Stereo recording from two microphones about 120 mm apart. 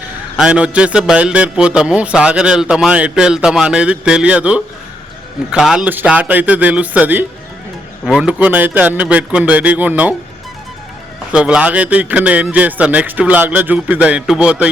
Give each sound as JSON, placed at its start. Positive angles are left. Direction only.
{"t": 0.3, "sound": "a man's voice", "side_deg": -10}
{"t": 11.3, "sound": "a man's voice", "side_deg": -10}